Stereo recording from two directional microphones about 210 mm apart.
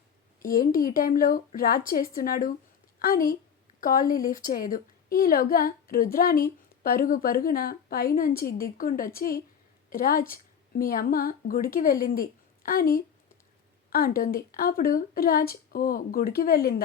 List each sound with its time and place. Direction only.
0.4 s a woman's voice: 40° left (ahead or behind)